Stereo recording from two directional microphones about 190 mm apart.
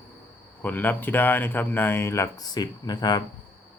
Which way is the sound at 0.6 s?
10° left (ahead or behind).